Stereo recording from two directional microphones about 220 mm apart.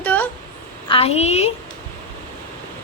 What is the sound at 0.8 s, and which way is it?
Speech, 25° left (ahead or behind).